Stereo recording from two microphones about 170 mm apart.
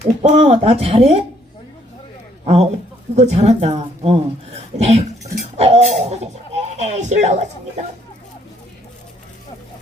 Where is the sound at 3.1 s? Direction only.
40° right (ahead or behind).